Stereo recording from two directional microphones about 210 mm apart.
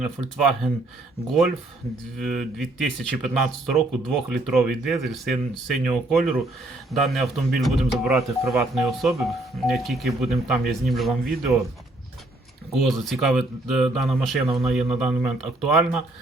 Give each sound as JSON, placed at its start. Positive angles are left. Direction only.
{"t": 0.0, "sound": "speech", "side_deg": 0}
{"t": 2.1, "sound": "speech", "side_deg": 0}
{"t": 12.8, "sound": "speech", "side_deg": 0}